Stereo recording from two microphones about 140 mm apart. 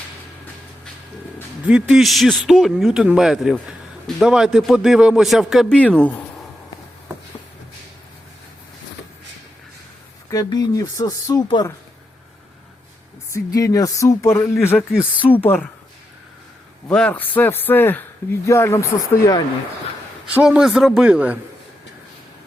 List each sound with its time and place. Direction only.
1.6 s a man's voice: 5° right (ahead or behind); by 6.1 s 10° left (ahead or behind)
10.2 s speech: 25° left (ahead or behind)
13.3 s a man's voice: 25° left (ahead or behind)
16.9 s a man's voice: 10° left (ahead or behind)
20.2 s a man's voice: 5° right (ahead or behind)